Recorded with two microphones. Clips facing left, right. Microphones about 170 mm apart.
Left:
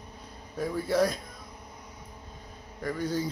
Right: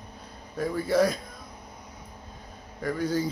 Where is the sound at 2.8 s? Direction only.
5° right (ahead or behind).